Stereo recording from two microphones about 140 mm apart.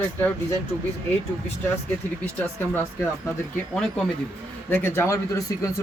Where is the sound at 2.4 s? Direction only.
15° left (ahead or behind).